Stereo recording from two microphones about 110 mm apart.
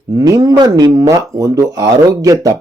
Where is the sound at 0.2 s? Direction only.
35° right (ahead or behind).